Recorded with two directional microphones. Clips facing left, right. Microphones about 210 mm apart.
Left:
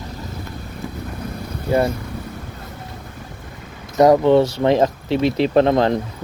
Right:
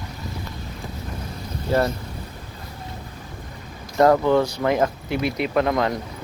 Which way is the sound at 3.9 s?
20° left (ahead or behind).